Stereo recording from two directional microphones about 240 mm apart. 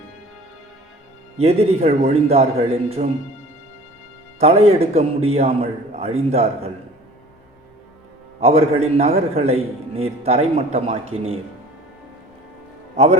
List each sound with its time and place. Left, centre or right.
1.4 s a man's voice: right
4.4 s a man's voice: right
8.4 s a man's voice: right